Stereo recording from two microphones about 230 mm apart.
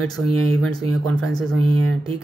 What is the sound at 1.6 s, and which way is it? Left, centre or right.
Speech, right.